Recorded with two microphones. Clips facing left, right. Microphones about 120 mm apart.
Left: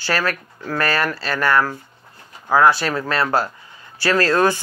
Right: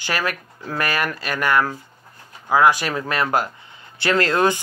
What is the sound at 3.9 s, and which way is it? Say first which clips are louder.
Speech: left 2 dB; 20° right (ahead or behind).